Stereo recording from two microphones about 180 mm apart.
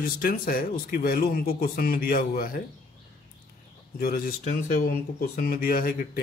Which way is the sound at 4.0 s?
55° left (ahead or behind).